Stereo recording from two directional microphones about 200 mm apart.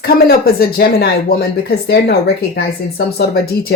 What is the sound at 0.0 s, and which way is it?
Speech, 50° left (ahead or behind).